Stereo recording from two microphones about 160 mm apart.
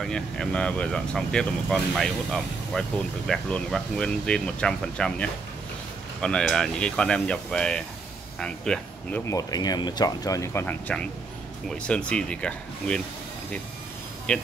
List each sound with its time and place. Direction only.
0.0 s speech: 5° left (ahead or behind)
9.3 s speech: 25° left (ahead or behind); by 13.0 s 5° left (ahead or behind)
14.3 s speech: 5° left (ahead or behind)